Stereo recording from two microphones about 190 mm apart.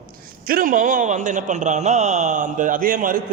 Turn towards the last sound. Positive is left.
turn(degrees=-45)  # may be behind; listen again after turning